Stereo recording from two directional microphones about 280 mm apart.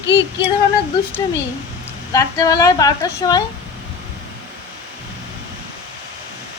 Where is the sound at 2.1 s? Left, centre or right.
Centre.